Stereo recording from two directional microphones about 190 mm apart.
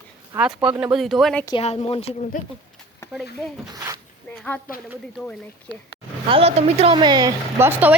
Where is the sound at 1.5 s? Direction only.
30° left (ahead or behind).